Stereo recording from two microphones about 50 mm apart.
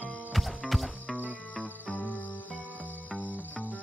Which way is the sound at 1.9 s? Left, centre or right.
Left.